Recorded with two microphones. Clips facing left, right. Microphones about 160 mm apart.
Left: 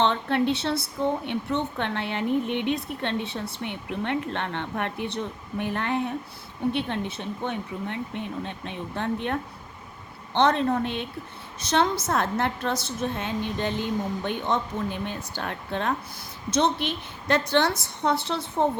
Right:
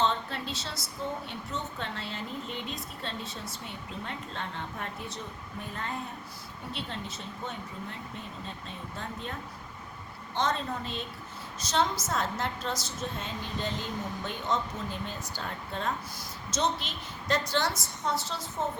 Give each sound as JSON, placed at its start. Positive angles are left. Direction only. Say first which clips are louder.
{"t": 0.0, "sound": "speech", "louder": "left 7 dB", "side_deg": 65}
{"t": 6.7, "sound": "a woman's voice", "louder": "left 10 dB", "side_deg": 65}